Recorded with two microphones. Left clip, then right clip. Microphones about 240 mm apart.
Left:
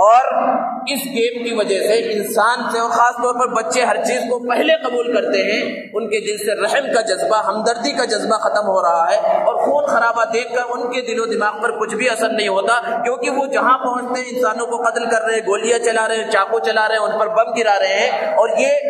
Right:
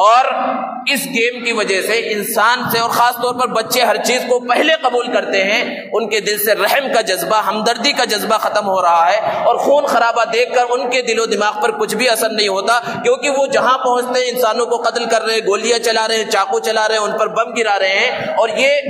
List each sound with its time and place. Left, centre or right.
0.0 s a sound: right
1.2 s a man's voice: right
3.0 s a man's voice: right
15.7 s a man's voice: right